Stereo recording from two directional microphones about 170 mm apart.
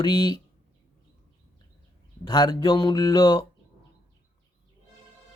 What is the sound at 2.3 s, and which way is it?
Speech, 25° left (ahead or behind).